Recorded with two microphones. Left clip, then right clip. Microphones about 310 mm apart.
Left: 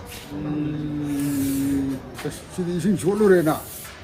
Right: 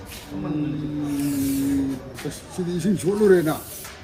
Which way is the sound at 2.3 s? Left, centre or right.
Centre.